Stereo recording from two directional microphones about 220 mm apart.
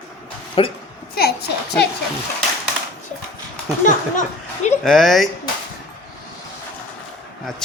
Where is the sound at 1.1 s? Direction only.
45° left (ahead or behind).